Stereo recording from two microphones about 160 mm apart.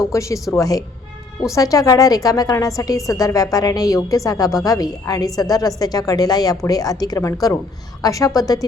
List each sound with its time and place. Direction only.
0.1 s a woman's voice: 20° left (ahead or behind)